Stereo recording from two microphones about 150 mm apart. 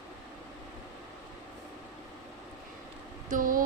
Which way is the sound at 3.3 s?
65° right (ahead or behind).